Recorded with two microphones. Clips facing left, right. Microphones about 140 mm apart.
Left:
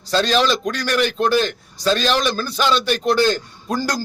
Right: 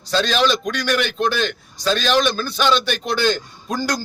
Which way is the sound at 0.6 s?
35° left (ahead or behind).